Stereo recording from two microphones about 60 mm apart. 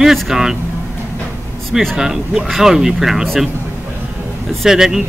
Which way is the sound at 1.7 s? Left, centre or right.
Centre.